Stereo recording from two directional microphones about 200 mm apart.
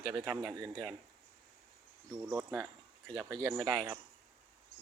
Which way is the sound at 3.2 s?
20° right (ahead or behind).